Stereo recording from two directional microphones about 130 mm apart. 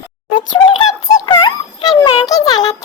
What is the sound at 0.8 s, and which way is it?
Music, 35° left (ahead or behind).